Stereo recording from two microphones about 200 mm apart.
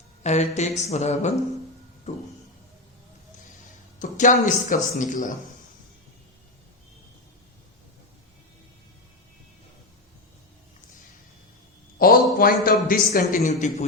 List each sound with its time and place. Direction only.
0.2 s speech: 35° left (ahead or behind)
4.0 s speech: 40° left (ahead or behind)
11.9 s a man's voice: 45° left (ahead or behind)